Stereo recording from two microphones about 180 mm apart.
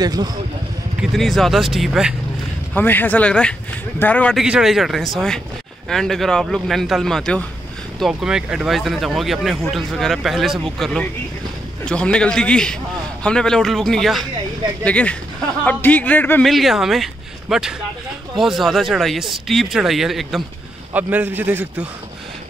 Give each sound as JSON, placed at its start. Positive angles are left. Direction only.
{"t": 0.0, "sound": "speech", "side_deg": -20}
{"t": 1.1, "sound": "speech", "side_deg": 0}
{"t": 2.7, "sound": "a man's voice", "side_deg": 10}